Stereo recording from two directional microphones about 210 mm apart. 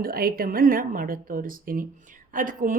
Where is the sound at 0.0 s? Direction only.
45° right (ahead or behind).